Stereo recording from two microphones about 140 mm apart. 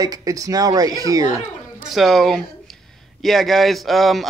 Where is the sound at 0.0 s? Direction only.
25° right (ahead or behind).